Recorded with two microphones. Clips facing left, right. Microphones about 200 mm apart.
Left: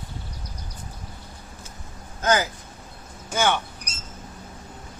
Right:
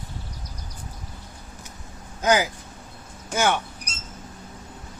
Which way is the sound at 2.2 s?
10° right (ahead or behind).